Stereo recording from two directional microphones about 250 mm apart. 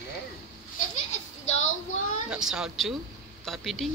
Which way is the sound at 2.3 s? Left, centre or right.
Centre.